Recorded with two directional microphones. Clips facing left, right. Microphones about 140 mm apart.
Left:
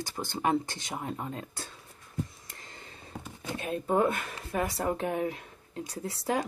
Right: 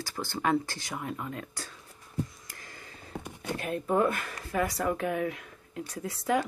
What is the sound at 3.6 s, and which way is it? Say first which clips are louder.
Speech: even; 25° left (ahead or behind).